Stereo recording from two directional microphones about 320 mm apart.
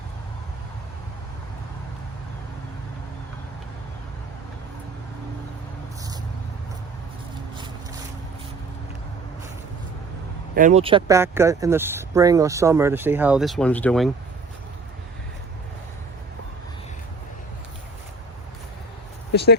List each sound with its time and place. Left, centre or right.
10.5 s speech: right; by 14.1 s centre
19.3 s speech: left